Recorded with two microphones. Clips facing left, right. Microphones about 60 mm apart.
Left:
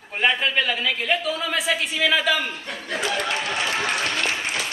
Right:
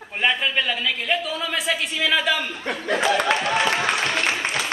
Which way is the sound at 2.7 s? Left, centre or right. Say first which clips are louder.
Right 8 dB; right.